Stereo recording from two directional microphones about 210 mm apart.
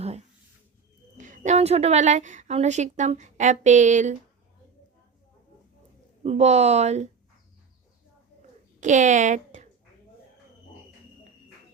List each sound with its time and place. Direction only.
1.2 s a woman's voice: 35° right (ahead or behind)
6.2 s a woman's voice: 30° right (ahead or behind)
8.8 s a woman's voice: 35° right (ahead or behind)